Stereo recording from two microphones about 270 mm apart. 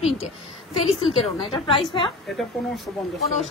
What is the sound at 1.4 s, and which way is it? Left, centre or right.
Speech, centre.